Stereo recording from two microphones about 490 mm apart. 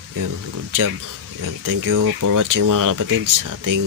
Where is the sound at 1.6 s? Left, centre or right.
Right.